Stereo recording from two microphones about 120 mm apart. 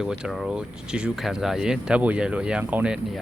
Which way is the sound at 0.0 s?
5° right (ahead or behind).